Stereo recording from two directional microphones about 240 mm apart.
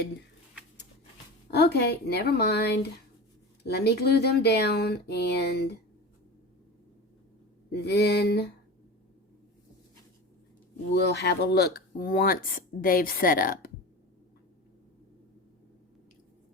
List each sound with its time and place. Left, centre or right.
1.5 s speech: left
3.7 s speech: left
7.7 s speech: left
10.9 s speech: left